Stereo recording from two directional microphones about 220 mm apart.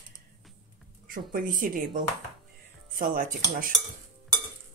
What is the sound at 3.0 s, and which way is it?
Speech, 40° right (ahead or behind).